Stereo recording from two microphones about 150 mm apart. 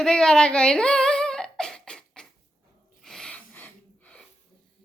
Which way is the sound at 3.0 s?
5° left (ahead or behind).